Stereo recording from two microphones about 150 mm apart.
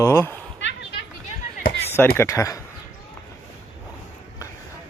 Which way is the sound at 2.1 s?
20° left (ahead or behind).